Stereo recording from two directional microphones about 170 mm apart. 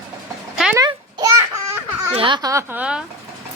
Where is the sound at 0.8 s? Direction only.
20° right (ahead or behind).